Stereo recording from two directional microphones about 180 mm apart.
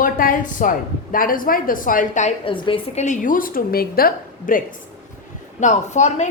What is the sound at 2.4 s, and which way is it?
A woman's voice, 30° left (ahead or behind).